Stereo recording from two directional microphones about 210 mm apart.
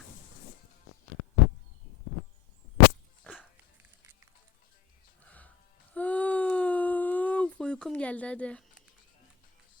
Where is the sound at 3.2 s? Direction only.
Centre (ahead or behind).